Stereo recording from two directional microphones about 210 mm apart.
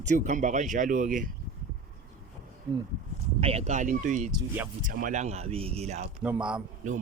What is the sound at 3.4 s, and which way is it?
Speech, 30° right (ahead or behind).